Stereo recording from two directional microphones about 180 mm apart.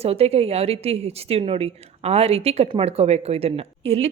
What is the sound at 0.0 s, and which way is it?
A woman's voice, 35° right (ahead or behind).